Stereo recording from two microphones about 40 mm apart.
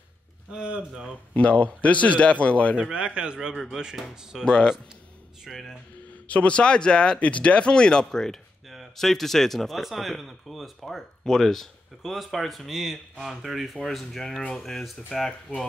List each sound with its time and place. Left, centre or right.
0.5 s speech: right
1.3 s speech: left
2.8 s speech: right
3.7 s speech: centre
4.5 s speech: centre
5.5 s speech: centre
6.2 s speech: left; by 11.1 s centre
11.2 s speech: centre